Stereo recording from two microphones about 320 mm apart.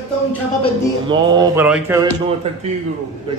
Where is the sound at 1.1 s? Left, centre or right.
Centre.